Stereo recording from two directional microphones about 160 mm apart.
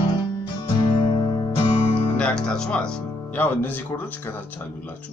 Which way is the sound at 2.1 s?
5° left (ahead or behind).